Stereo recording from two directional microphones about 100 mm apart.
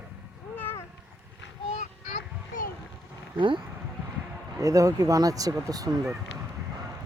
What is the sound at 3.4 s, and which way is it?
Speech, 55° right (ahead or behind).